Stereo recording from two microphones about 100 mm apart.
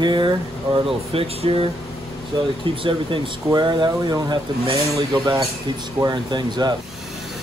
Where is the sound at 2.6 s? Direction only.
60° right (ahead or behind); by 6.7 s 45° right (ahead or behind).